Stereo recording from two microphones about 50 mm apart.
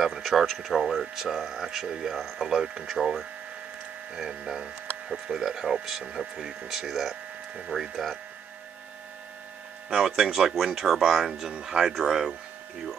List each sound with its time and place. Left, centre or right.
0.0 s speech: centre
9.9 s speech: centre